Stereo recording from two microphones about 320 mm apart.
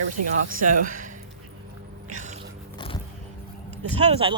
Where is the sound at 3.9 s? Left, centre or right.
Centre.